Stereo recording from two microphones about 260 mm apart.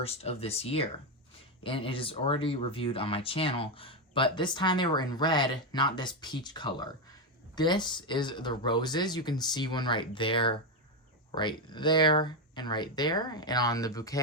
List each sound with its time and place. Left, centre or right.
0.0 s speech: left